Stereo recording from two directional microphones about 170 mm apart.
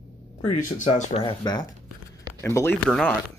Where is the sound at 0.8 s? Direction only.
40° left (ahead or behind).